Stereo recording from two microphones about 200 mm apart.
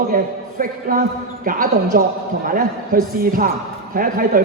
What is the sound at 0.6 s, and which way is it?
A woman's voice, 45° right (ahead or behind).